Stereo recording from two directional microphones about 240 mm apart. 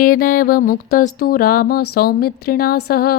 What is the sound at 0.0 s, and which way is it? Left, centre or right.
Speech, left.